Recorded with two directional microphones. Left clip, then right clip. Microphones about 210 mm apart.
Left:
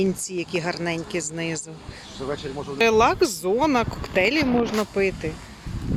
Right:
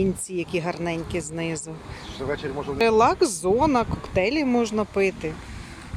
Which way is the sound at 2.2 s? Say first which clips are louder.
Right 1 dB; 45° left (ahead or behind).